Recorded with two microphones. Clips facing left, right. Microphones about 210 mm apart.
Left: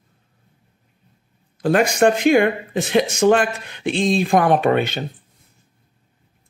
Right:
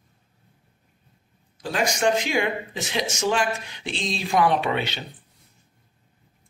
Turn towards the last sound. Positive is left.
turn(degrees=50)  # may be behind; listen again after turning